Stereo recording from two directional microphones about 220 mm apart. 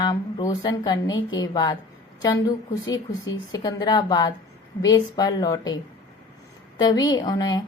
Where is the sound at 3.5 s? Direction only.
15° left (ahead or behind).